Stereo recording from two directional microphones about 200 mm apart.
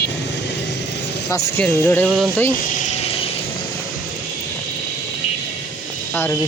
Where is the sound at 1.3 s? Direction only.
15° left (ahead or behind).